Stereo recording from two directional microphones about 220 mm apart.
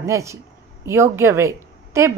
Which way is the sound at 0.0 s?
15° right (ahead or behind).